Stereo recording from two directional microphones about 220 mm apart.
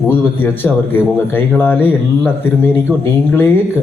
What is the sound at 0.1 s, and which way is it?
A man's voice, 10° left (ahead or behind).